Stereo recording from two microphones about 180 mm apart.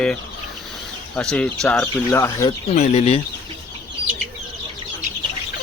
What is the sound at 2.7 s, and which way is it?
Speech, 40° left (ahead or behind).